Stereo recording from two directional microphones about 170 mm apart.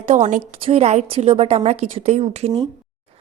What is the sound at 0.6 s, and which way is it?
A woman's voice, 35° right (ahead or behind).